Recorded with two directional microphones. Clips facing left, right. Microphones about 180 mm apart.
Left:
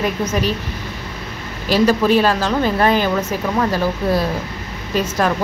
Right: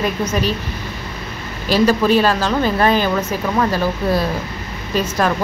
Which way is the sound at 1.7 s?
20° left (ahead or behind).